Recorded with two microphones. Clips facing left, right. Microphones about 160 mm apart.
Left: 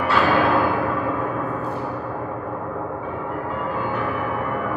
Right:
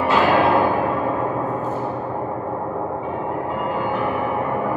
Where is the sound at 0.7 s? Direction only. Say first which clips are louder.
Right 2 dB; 10° right (ahead or behind).